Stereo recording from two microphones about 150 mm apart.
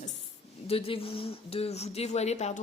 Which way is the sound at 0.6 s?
40° left (ahead or behind).